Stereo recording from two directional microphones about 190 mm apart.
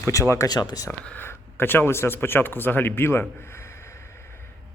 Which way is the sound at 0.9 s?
10° left (ahead or behind).